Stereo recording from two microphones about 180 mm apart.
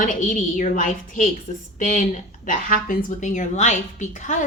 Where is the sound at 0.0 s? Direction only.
45° left (ahead or behind).